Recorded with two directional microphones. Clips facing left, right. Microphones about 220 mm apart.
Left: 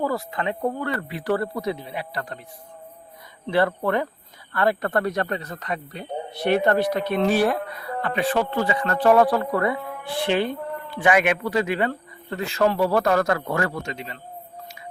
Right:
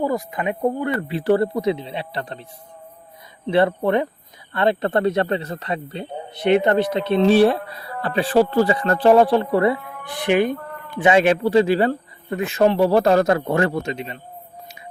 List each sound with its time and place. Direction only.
0.0 s speech: 20° right (ahead or behind)
3.4 s speech: 20° right (ahead or behind)
10.1 s speech: 15° right (ahead or behind); by 11.9 s 30° right (ahead or behind)
12.3 s speech: 20° right (ahead or behind)